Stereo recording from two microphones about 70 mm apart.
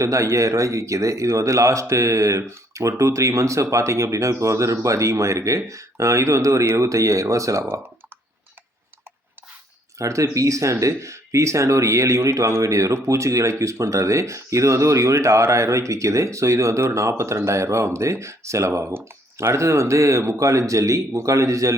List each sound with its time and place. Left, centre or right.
0.0 s speech: right
10.0 s speech: right